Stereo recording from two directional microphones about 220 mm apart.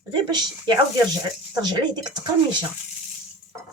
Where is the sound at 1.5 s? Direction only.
20° right (ahead or behind).